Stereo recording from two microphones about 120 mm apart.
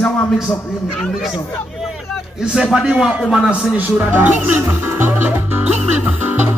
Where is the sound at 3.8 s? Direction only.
15° right (ahead or behind).